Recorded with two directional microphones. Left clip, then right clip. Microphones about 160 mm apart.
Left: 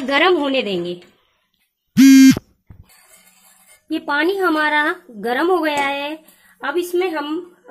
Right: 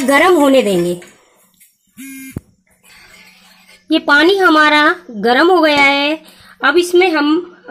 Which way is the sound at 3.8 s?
25° right (ahead or behind).